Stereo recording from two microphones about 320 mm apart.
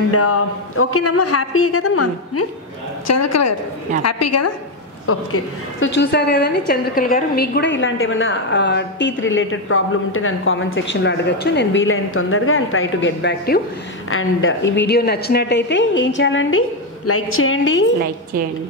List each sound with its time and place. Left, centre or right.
0.1 s speech: left
5.9 s a woman's voice: left